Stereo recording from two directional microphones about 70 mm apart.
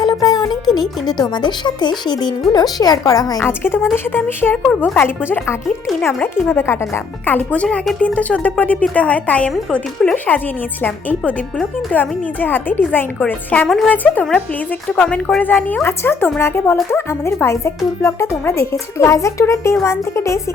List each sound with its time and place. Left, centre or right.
0.0 s speech: left
2.7 s a woman's voice: left
3.4 s a woman's voice: left
4.5 s a woman's voice: centre
4.8 s a woman's voice: left
11.9 s a woman's voice: left